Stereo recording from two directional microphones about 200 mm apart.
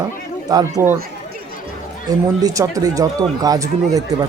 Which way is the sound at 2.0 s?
15° right (ahead or behind).